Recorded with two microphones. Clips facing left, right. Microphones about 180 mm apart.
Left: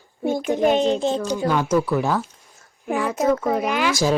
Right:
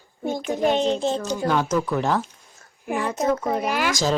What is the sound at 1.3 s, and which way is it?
Speech, 10° left (ahead or behind).